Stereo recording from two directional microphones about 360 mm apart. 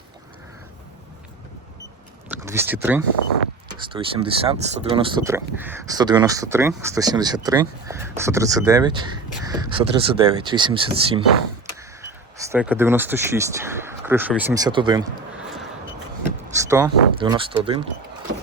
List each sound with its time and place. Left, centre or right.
2.3 s speech: centre
12.5 s speech: centre
16.6 s speech: centre